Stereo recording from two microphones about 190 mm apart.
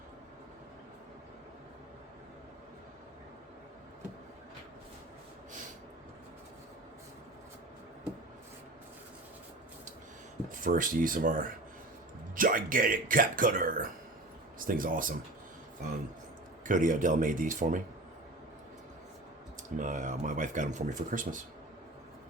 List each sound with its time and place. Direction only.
10.5 s speech: 45° right (ahead or behind)
16.6 s speech: 45° right (ahead or behind)
19.8 s speech: 40° right (ahead or behind)